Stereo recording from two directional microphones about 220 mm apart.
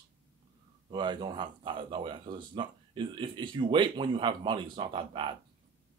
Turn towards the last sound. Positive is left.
turn(degrees=-25)  # may be behind; listen again after turning